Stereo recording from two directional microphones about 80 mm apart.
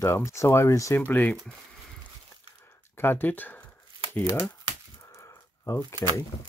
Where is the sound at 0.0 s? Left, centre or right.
Left.